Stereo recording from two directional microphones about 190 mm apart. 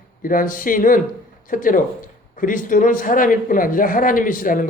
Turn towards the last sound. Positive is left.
turn(degrees=45)  # may be behind; listen again after turning